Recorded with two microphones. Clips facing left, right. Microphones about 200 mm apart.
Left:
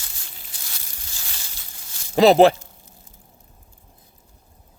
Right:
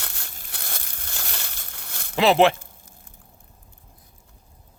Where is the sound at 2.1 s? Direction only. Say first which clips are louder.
Left 5 dB; 40° left (ahead or behind).